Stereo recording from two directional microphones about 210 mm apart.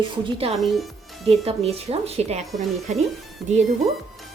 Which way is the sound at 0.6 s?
Centre (ahead or behind).